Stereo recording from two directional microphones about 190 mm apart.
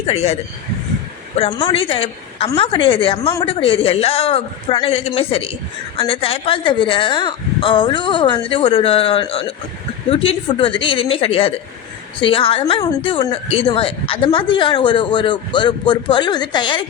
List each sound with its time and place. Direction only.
0.0 s speech: 35° left (ahead or behind)
1.4 s a woman's voice: 25° left (ahead or behind)